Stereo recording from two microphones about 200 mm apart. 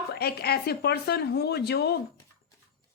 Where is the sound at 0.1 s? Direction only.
55° left (ahead or behind).